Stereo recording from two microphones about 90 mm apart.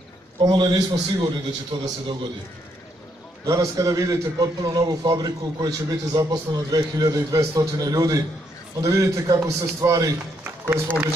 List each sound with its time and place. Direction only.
0.4 s a man's voice: 55° right (ahead or behind)
3.4 s a man's voice: 35° right (ahead or behind)